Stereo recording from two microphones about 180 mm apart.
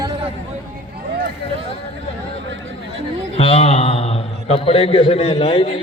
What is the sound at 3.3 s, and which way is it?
A man's voice, 35° left (ahead or behind).